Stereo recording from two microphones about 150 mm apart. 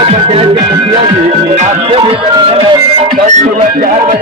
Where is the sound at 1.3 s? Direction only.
45° right (ahead or behind).